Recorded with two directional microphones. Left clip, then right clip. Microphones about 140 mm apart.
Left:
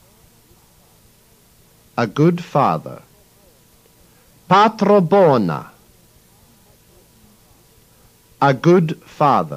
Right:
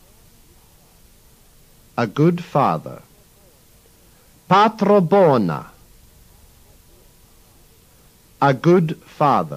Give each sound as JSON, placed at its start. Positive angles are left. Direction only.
{"t": 2.0, "sound": "a man's voice", "side_deg": 30}
{"t": 4.5, "sound": "a man's voice", "side_deg": 30}
{"t": 8.4, "sound": "a man's voice", "side_deg": 30}